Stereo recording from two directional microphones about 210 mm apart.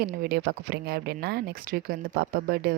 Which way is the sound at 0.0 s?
45° right (ahead or behind).